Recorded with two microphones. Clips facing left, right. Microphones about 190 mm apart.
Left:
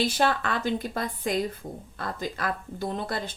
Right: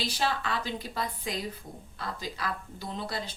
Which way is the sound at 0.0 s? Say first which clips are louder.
Left 6 dB; 55° left (ahead or behind).